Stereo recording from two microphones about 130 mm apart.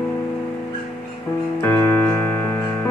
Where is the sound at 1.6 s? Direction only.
20° left (ahead or behind).